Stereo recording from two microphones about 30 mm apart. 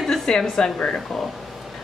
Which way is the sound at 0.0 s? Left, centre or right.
Centre.